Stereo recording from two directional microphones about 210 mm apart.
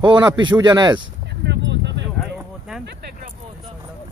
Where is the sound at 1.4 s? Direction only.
55° right (ahead or behind).